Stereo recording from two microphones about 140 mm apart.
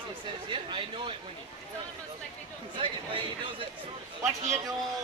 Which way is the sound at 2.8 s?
40° right (ahead or behind).